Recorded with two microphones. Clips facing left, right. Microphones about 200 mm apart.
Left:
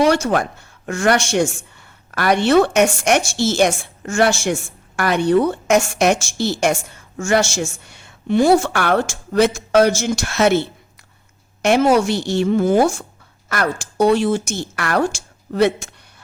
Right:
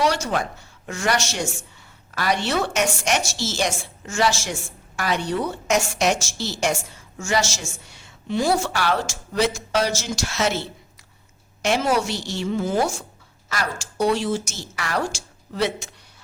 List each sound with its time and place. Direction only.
0.0 s a woman's voice: 55° left (ahead or behind)